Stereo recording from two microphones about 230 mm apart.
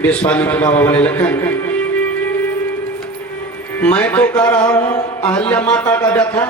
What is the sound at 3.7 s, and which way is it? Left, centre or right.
Speech, centre.